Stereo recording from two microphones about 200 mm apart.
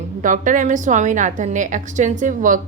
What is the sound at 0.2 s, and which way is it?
A woman's voice, 40° right (ahead or behind).